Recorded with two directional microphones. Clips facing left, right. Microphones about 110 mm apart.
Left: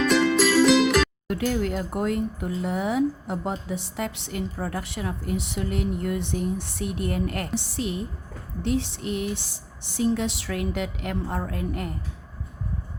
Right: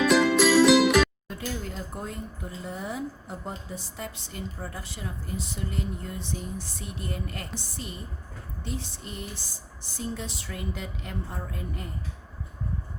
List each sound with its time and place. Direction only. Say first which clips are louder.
0.0 s music: even; 5° right (ahead or behind)
1.3 s speech: left 10 dB; 75° left (ahead or behind)